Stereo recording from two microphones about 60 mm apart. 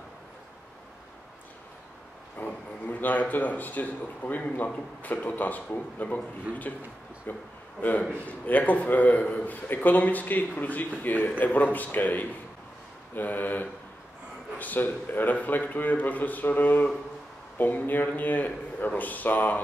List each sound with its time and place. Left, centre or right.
2.3 s a man's voice: left